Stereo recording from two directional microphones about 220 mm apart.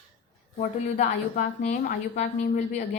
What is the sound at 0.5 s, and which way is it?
A woman's voice, 35° left (ahead or behind).